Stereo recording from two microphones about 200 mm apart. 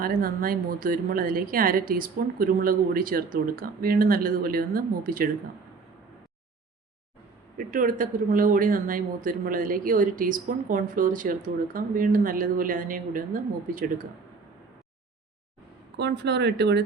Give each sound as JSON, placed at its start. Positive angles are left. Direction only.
{"t": 0.0, "sound": "speech", "side_deg": -45}
{"t": 7.7, "sound": "speech", "side_deg": -45}
{"t": 16.0, "sound": "speech", "side_deg": -55}